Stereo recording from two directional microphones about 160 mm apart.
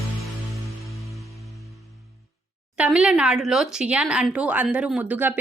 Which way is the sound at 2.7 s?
5° right (ahead or behind).